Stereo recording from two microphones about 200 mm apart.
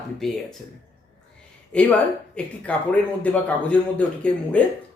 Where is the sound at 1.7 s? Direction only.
5° left (ahead or behind).